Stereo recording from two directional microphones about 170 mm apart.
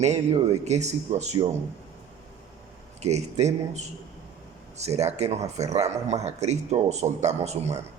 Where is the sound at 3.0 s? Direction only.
40° right (ahead or behind).